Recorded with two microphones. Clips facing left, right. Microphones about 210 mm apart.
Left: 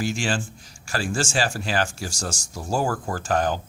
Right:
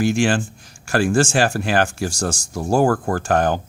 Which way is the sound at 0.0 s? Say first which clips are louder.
Right 8 dB; 55° right (ahead or behind).